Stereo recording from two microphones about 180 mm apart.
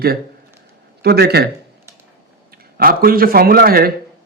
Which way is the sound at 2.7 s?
55° right (ahead or behind).